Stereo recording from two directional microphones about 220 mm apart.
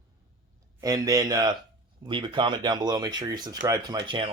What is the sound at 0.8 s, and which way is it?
Speech, 15° right (ahead or behind).